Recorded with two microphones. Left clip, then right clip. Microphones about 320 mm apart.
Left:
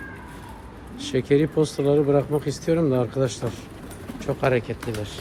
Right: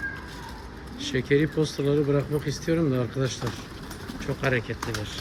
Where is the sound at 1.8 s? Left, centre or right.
Centre.